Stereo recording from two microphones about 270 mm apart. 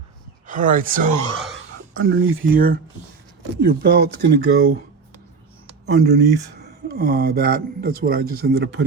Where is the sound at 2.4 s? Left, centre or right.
Right.